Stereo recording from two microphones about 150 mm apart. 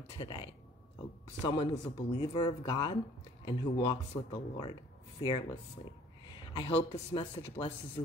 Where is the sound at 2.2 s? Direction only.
30° left (ahead or behind).